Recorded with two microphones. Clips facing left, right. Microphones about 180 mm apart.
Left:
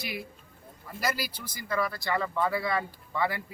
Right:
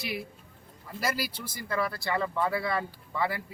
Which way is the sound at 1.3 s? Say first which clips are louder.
Right 2 dB; 25° right (ahead or behind).